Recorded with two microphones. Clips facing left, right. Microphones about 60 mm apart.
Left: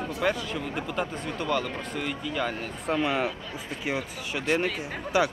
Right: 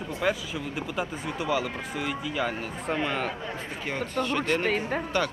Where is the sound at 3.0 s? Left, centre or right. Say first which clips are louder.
Left 3 dB; centre.